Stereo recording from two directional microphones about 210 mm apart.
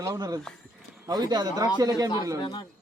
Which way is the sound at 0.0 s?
15° right (ahead or behind).